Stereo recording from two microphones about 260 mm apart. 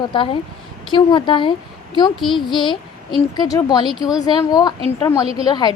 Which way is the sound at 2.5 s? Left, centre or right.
Centre.